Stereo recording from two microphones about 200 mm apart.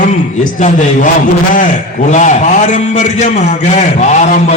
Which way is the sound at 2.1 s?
35° left (ahead or behind).